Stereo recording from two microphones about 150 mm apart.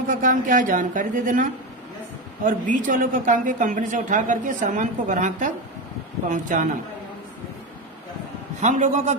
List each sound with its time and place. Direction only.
0.1 s a woman's voice: 60° right (ahead or behind)
8.6 s a man's voice: 55° right (ahead or behind)